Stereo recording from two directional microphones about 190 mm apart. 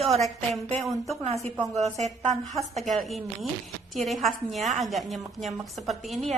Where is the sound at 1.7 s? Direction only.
35° right (ahead or behind).